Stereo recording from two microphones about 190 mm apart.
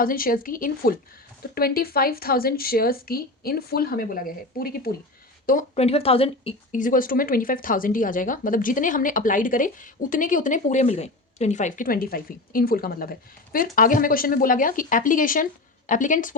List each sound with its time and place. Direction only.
0.0 s speech: 50° left (ahead or behind)
5.5 s speech: 40° left (ahead or behind)
6.7 s speech: 45° left (ahead or behind)